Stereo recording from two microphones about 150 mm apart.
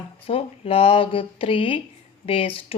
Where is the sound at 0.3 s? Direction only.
40° left (ahead or behind).